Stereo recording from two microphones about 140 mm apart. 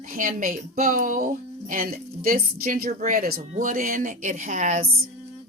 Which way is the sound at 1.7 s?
90° right.